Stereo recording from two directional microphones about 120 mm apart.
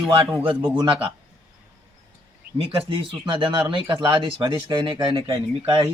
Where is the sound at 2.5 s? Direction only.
55° right (ahead or behind).